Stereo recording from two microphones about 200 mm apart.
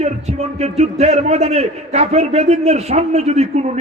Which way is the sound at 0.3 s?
30° right (ahead or behind).